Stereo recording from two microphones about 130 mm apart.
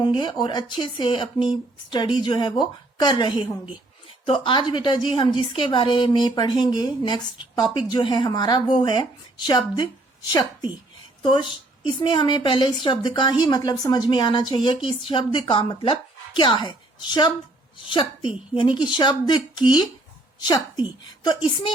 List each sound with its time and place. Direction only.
0.0 s a woman's voice: 35° left (ahead or behind)
11.2 s a woman's voice: 35° left (ahead or behind)